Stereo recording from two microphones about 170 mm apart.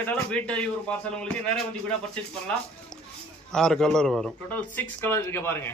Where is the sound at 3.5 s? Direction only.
5° left (ahead or behind).